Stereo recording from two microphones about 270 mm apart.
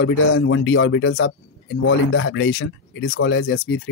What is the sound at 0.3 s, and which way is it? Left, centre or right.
Speech, left.